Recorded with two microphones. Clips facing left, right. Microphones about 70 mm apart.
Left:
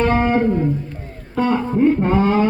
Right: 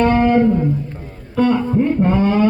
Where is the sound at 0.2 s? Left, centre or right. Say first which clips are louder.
Right 3 dB; left.